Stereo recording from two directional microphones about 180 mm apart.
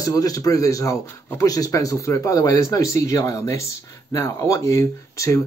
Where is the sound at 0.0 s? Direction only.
20° left (ahead or behind).